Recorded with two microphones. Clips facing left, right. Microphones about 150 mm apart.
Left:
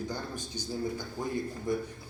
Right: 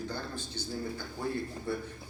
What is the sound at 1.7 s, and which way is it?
Speech, 15° left (ahead or behind).